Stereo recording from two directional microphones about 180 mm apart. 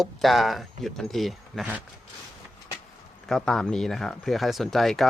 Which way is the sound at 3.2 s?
Centre (ahead or behind).